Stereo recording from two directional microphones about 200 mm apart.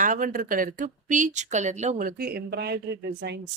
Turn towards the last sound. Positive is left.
turn(degrees=-60)  # may be behind; listen again after turning